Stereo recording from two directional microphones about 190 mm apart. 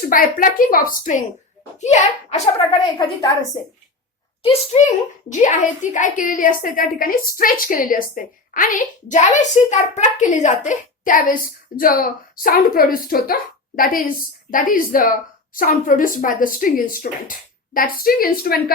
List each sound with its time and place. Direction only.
0.1 s a woman's voice: 45° left (ahead or behind)
3.2 s a woman's voice: 20° left (ahead or behind)
4.4 s a child's voice: 35° left (ahead or behind); by 18.6 s 50° left (ahead or behind)